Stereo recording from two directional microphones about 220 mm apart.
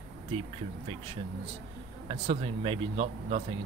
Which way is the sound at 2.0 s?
30° right (ahead or behind).